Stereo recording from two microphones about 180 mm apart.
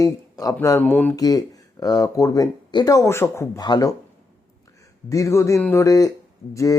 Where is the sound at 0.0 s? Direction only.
20° left (ahead or behind).